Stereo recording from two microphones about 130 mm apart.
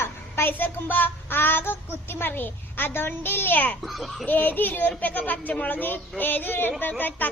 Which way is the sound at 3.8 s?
Centre (ahead or behind).